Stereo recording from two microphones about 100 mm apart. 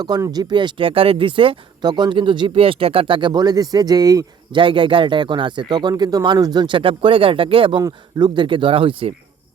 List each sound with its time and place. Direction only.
0.3 s speech: 45° right (ahead or behind); by 1.5 s 60° right (ahead or behind)
1.8 s speech: 45° right (ahead or behind)
4.5 s speech: 60° right (ahead or behind)
7.8 s speech: 40° right (ahead or behind); by 9.1 s 60° right (ahead or behind)